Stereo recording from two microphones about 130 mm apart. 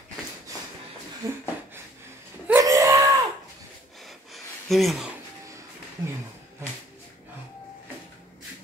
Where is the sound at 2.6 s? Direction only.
25° right (ahead or behind).